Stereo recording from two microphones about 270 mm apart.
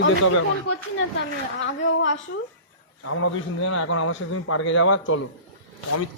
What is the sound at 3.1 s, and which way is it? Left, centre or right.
A man's voice, left.